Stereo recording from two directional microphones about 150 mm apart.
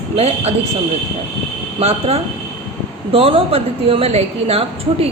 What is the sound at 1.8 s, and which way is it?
A woman's voice, 45° right (ahead or behind).